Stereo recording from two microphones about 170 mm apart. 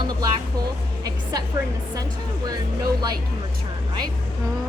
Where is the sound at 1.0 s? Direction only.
20° right (ahead or behind).